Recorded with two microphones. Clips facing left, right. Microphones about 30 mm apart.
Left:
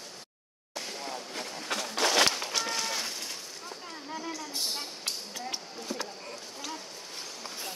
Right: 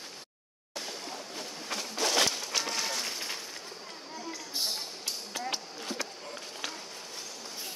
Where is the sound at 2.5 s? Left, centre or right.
Centre.